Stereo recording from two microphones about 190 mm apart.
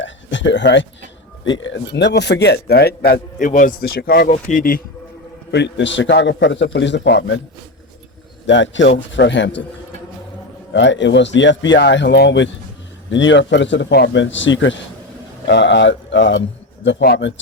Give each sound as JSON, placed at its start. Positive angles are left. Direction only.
{"t": 0.0, "sound": "a sound", "side_deg": 75}
{"t": 1.5, "sound": "a man's voice", "side_deg": 85}
{"t": 5.5, "sound": "a man's voice", "side_deg": 65}
{"t": 8.4, "sound": "a man's voice", "side_deg": 70}
{"t": 10.7, "sound": "a man's voice", "side_deg": 70}
{"t": 15.4, "sound": "a man's voice", "side_deg": 65}